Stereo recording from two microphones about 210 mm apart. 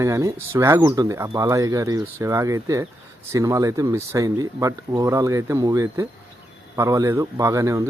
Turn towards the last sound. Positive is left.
turn(degrees=-15)  # may be behind; listen again after turning